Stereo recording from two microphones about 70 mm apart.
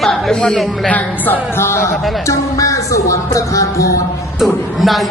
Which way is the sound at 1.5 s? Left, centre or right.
Left.